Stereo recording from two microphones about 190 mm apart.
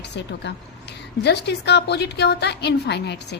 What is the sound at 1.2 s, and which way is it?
A woman's voice, 60° left (ahead or behind).